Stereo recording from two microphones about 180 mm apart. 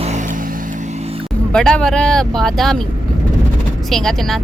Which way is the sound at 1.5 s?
5° left (ahead or behind).